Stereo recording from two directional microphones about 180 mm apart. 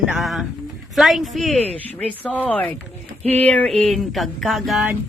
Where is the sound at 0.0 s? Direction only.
Centre (ahead or behind).